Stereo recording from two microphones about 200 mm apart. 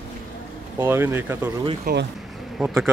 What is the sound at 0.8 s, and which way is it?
Speech, 10° right (ahead or behind).